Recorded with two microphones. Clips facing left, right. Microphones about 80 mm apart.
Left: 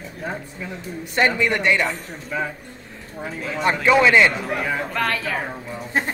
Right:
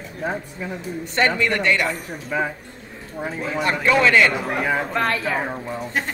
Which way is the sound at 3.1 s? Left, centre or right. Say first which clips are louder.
Right 3 dB; centre.